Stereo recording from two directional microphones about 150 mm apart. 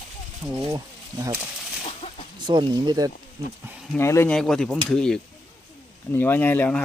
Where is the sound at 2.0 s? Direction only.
45° left (ahead or behind).